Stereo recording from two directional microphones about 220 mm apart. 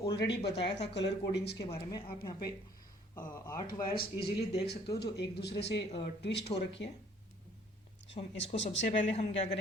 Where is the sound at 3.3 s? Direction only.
15° left (ahead or behind).